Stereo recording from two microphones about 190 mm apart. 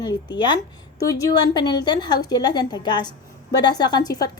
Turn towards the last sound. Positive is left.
turn(degrees=20)  # may be behind; listen again after turning